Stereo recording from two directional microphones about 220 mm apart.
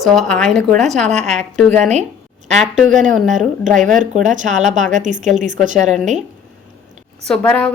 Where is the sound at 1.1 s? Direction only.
30° right (ahead or behind).